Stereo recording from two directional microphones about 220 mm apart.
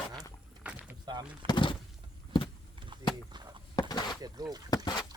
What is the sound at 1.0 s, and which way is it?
Speech, 20° right (ahead or behind).